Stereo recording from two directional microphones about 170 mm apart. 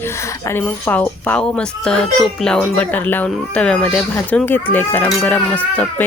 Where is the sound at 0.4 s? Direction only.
10° left (ahead or behind).